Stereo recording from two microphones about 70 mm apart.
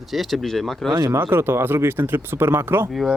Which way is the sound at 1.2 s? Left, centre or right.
Right.